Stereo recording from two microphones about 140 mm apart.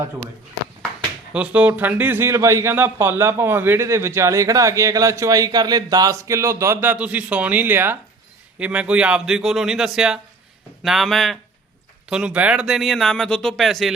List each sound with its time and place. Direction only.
1.3 s speech: 10° right (ahead or behind)